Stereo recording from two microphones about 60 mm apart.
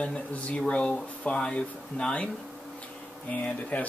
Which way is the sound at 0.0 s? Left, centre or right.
Centre.